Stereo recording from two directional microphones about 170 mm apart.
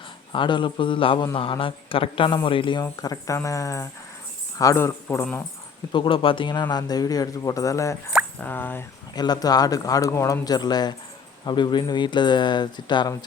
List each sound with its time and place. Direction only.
0.3 s a man's voice: 30° left (ahead or behind)
5.9 s a man's voice: 30° left (ahead or behind); by 8.8 s 10° left (ahead or behind)
9.1 s a man's voice: 25° left (ahead or behind)